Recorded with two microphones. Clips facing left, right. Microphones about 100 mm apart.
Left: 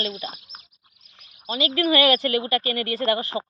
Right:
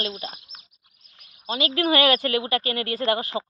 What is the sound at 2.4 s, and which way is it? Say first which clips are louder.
Speech: left 1 dB; 40° left (ahead or behind).